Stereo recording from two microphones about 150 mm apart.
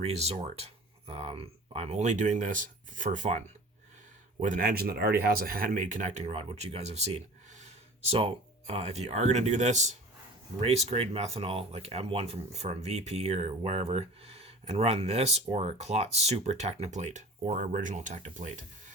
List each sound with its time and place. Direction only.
0.0 s speech: 45° right (ahead or behind)